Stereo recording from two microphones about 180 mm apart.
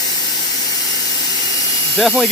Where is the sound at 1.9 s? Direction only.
Centre (ahead or behind).